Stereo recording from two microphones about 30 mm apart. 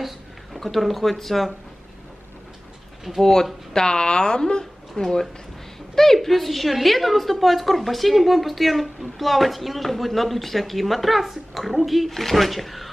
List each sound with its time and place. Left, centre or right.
0.6 s a woman's voice: centre
3.1 s speech: centre
3.7 s speech: left
6.1 s a woman's voice: centre